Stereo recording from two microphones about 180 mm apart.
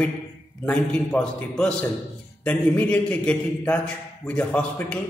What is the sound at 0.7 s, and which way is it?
A man's voice, 5° left (ahead or behind).